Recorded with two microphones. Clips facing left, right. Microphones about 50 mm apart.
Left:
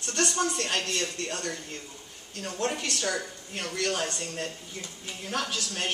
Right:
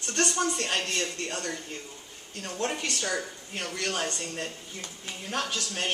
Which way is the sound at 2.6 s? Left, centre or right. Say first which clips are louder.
Left 1 dB; centre.